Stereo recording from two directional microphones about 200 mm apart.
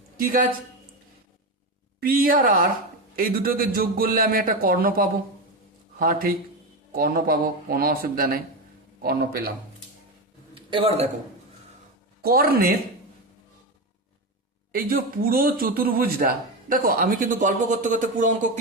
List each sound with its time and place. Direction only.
0.2 s speech: 45° right (ahead or behind)
2.0 s speech: 45° right (ahead or behind)
10.5 s a man's voice: 25° right (ahead or behind)
12.2 s speech: 50° right (ahead or behind)
14.7 s speech: 45° right (ahead or behind)